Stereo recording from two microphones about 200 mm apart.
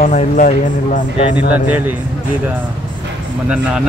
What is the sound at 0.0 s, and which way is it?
Speech, 40° left (ahead or behind).